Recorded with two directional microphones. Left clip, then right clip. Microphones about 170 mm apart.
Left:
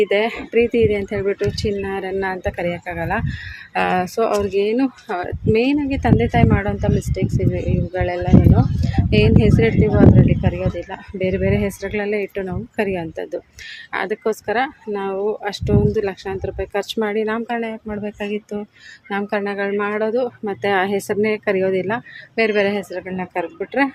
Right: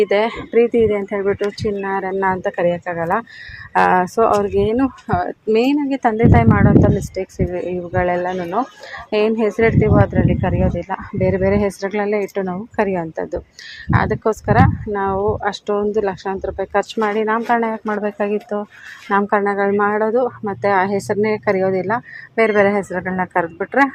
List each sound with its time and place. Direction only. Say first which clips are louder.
0.0 s speech: right 2 dB; 5° left (ahead or behind)
17.0 s speech: right 1 dB; 15° left (ahead or behind)
17.4 s speech: right 7 dB; 5° left (ahead or behind)
20.4 s speech: right 2 dB; 15° left (ahead or behind)